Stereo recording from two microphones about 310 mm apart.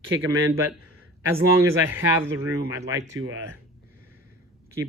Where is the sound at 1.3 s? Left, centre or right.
Centre.